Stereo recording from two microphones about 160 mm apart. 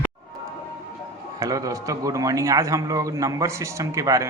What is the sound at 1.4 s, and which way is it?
A man's voice, 20° right (ahead or behind).